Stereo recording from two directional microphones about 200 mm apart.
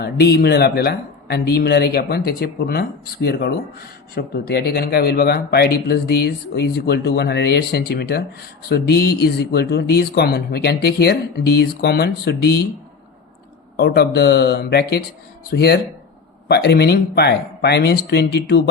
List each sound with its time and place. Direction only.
0.0 s speech: 55° left (ahead or behind)
13.7 s speech: 55° left (ahead or behind)